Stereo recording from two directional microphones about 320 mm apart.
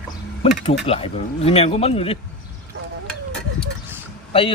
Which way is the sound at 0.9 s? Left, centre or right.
Centre.